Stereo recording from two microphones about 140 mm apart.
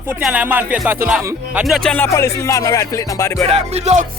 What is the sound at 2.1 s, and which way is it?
Speech, 20° left (ahead or behind).